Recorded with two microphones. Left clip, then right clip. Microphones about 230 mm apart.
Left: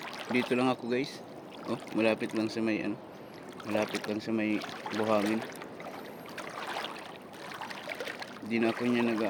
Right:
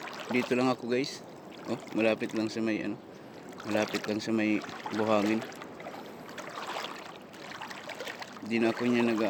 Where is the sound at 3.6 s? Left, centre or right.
Centre.